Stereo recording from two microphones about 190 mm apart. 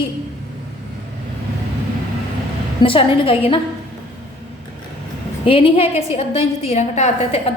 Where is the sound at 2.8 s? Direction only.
25° left (ahead or behind).